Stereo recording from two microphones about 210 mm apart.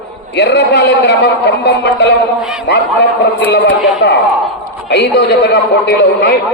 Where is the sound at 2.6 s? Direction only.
55° left (ahead or behind).